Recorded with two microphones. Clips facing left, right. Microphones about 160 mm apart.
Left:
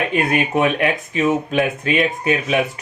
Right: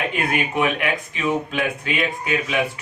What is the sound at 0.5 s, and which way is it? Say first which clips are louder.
Speech: left 4 dB; 40° left (ahead or behind).